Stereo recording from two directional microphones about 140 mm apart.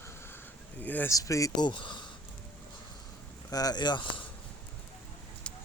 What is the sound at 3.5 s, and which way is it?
Speech, 30° left (ahead or behind).